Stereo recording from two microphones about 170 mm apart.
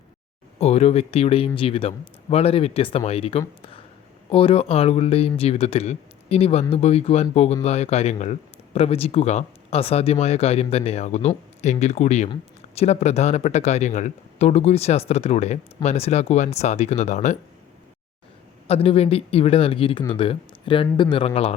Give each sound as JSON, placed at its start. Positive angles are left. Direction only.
{"t": 0.6, "sound": "speech", "side_deg": 40}
{"t": 18.7, "sound": "speech", "side_deg": 35}